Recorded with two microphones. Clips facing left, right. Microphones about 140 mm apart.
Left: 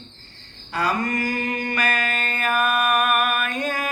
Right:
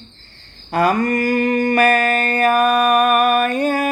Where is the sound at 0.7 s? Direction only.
50° right (ahead or behind).